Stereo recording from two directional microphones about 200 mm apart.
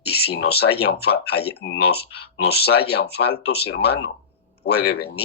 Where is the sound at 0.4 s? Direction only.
55° left (ahead or behind).